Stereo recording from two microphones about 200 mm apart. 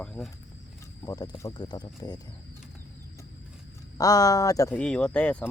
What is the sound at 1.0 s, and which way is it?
Speech, 20° left (ahead or behind).